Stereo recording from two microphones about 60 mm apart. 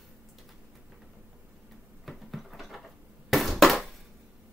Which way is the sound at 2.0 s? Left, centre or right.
Centre.